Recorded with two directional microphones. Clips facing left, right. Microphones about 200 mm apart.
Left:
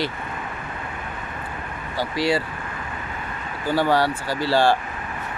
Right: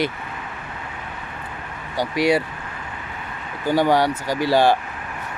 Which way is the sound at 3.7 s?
15° right (ahead or behind).